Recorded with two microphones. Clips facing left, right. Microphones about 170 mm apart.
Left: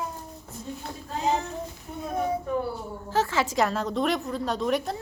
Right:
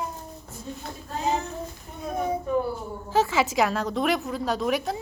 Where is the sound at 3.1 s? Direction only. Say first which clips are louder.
Right 3 dB; 10° right (ahead or behind).